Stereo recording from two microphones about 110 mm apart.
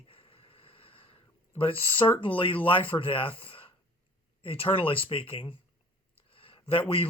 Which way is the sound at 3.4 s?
55° left (ahead or behind).